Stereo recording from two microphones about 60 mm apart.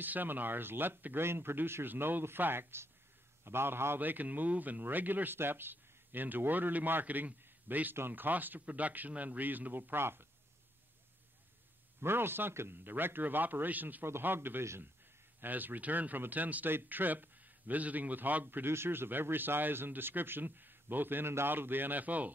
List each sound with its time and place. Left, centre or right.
0.0 s a man's voice: right
12.0 s a man's voice: right
14.0 s a man's voice: right
15.4 s a man's voice: right